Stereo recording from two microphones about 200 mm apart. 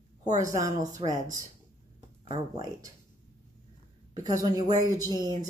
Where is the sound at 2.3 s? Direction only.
20° right (ahead or behind).